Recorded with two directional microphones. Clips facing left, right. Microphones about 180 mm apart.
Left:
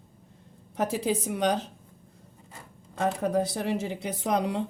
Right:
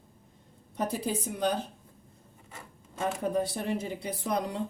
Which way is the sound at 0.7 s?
90° left.